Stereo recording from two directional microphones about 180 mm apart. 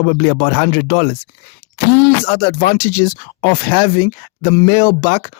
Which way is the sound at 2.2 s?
60° left (ahead or behind).